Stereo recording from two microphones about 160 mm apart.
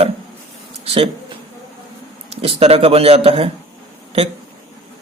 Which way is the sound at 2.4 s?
40° right (ahead or behind).